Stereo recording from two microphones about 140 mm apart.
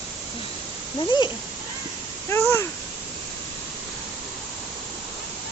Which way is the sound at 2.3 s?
20° left (ahead or behind).